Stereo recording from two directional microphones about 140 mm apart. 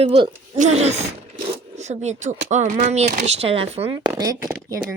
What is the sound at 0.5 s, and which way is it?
Speech, 55° right (ahead or behind).